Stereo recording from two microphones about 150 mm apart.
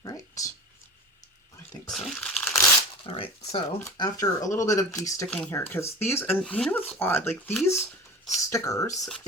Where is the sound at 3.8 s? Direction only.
25° left (ahead or behind).